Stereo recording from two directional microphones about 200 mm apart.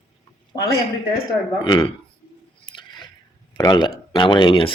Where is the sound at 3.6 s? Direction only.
20° left (ahead or behind).